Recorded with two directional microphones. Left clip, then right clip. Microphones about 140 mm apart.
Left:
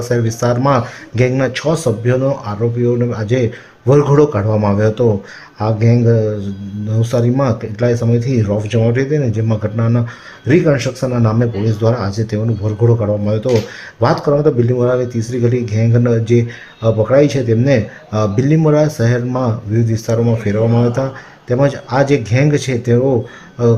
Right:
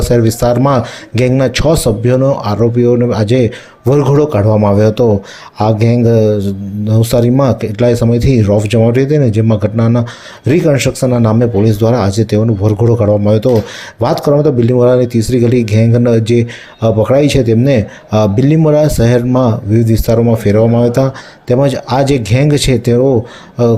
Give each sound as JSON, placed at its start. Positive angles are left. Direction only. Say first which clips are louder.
{"t": 0.1, "sound": "speech", "louder": "right 6 dB", "side_deg": -40}